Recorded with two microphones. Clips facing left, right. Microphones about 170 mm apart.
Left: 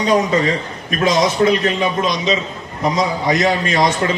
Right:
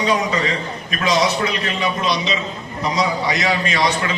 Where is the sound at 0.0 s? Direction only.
45° left (ahead or behind).